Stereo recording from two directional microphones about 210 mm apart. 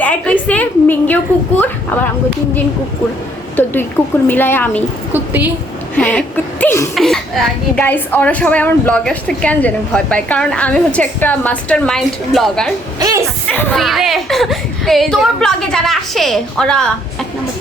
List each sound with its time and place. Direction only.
0.0 s a woman's voice: 5° left (ahead or behind)
3.5 s a woman's voice: 10° left (ahead or behind)
5.1 s a woman's voice: 10° right (ahead or behind)
6.0 s a woman's voice: 5° left (ahead or behind)
13.0 s a sound: 15° right (ahead or behind)
13.5 s a woman's voice: 5° left (ahead or behind)